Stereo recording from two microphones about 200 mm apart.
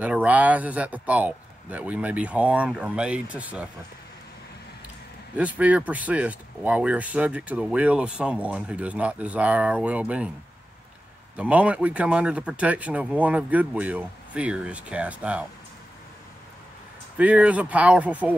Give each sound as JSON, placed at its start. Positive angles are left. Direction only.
{"t": 0.0, "sound": "speech", "side_deg": -5}
{"t": 5.3, "sound": "speech", "side_deg": -5}
{"t": 11.3, "sound": "speech", "side_deg": -5}
{"t": 17.2, "sound": "speech", "side_deg": -5}